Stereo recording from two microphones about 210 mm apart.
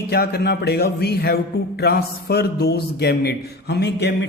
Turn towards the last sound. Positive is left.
turn(degrees=55)  # may be behind; listen again after turning